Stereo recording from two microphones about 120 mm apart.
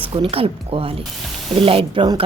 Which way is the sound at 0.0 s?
50° right (ahead or behind).